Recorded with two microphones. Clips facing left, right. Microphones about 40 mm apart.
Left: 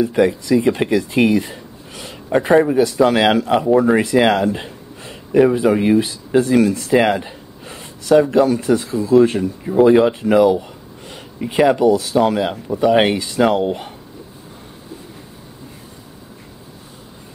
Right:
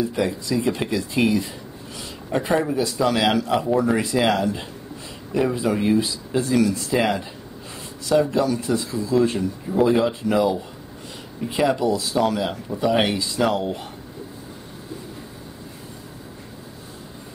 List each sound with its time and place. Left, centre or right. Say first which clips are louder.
0.0 s a man's voice: left 8 dB; left
4.0 s a sound: left 6 dB; left
5.5 s a man's voice: left 6 dB; left
12.2 s a man's voice: left 5 dB; left